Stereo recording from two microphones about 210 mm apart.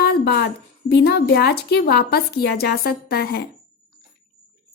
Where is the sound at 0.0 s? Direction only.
50° left (ahead or behind).